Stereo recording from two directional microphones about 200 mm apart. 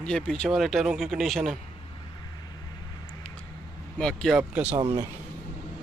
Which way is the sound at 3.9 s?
5° left (ahead or behind).